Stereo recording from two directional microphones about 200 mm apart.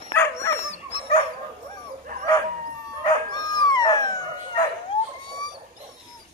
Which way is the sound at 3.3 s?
20° left (ahead or behind).